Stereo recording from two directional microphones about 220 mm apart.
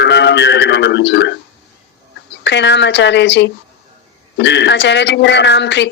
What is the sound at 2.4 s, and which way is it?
Speech, 50° left (ahead or behind).